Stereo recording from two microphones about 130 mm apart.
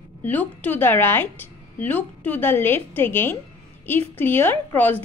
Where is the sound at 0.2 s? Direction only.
10° left (ahead or behind).